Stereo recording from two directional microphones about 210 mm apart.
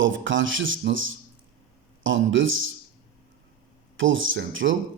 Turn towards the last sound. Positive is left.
turn(degrees=-65)  # may be behind; listen again after turning